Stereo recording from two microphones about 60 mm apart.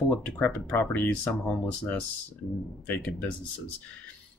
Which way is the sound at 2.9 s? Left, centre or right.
Left.